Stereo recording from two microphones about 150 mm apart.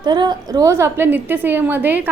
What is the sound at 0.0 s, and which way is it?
A woman's voice, 30° right (ahead or behind).